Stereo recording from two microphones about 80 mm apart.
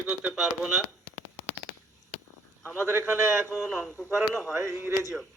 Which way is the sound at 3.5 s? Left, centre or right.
Centre.